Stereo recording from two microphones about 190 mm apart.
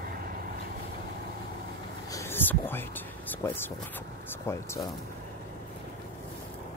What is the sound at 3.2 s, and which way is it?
Speech, 10° left (ahead or behind).